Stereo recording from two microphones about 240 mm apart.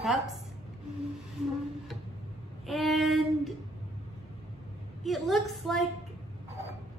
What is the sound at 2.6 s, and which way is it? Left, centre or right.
Child singing, centre.